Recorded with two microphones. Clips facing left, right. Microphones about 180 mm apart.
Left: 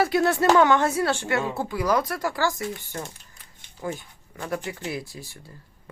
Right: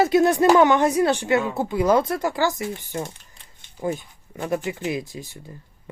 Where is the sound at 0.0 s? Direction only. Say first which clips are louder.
Right 4 dB; 20° right (ahead or behind).